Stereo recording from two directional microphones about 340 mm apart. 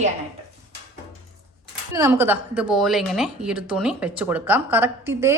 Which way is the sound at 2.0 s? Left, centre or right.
Centre.